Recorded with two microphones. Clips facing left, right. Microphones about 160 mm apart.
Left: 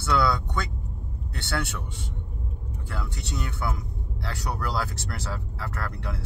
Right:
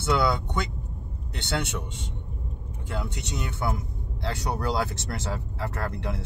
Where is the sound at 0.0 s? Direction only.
20° right (ahead or behind).